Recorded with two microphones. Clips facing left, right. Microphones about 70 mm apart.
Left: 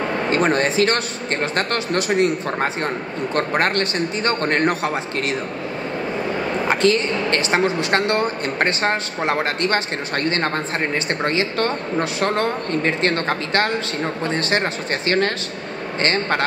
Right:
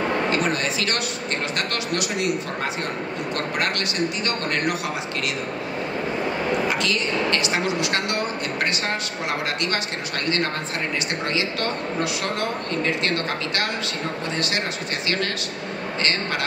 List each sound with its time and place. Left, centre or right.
0.3 s a woman's voice: left
6.7 s a woman's voice: left
15.0 s a woman's voice: left